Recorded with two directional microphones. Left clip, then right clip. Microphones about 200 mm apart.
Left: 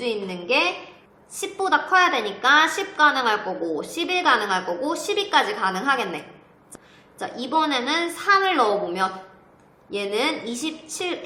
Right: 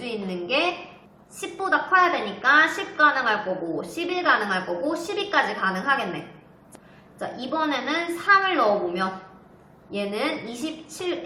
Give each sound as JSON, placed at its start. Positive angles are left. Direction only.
{"t": 0.0, "sound": "a woman's voice", "side_deg": 35}
{"t": 7.2, "sound": "a woman's voice", "side_deg": 45}